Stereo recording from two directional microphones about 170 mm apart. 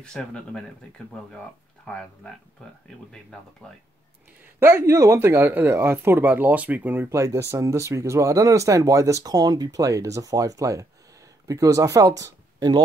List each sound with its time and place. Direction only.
0.0 s speech: 5° left (ahead or behind)
3.6 s speech: 5° left (ahead or behind)
4.6 s speech: 15° right (ahead or behind)